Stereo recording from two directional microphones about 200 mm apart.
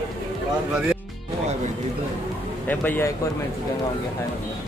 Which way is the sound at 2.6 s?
10° left (ahead or behind).